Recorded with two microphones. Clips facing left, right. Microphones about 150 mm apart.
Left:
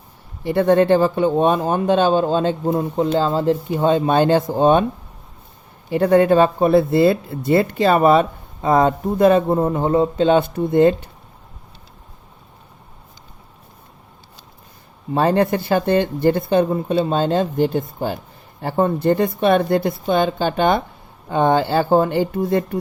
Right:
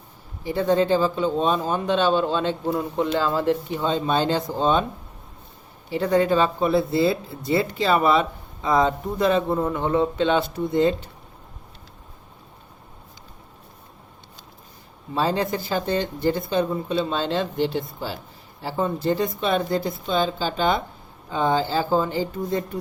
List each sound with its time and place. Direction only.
0.4 s speech: 60° left (ahead or behind); by 2.8 s 45° left (ahead or behind)
3.2 s speech: 35° left (ahead or behind)
3.8 s speech: 55° left (ahead or behind)
5.9 s speech: 55° left (ahead or behind)
9.7 s speech: 40° left (ahead or behind); by 11.1 s 55° left (ahead or behind)
15.1 s speech: 60° left (ahead or behind)